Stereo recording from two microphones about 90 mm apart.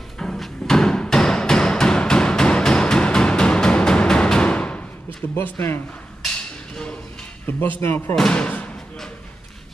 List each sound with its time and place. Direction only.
0.2 s music: 5° left (ahead or behind)
5.3 s speech: 25° left (ahead or behind)
7.8 s speech: 25° left (ahead or behind)
8.2 s slam: 10° left (ahead or behind)